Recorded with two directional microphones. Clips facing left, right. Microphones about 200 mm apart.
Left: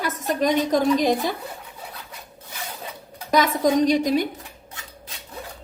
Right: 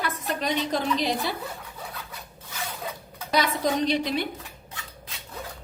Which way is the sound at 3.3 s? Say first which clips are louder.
Left 6 dB; 45° left (ahead or behind).